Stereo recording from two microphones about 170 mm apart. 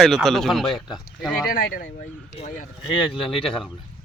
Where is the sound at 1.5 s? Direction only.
55° left (ahead or behind).